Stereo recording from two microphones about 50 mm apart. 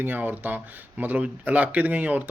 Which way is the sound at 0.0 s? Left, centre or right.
Right.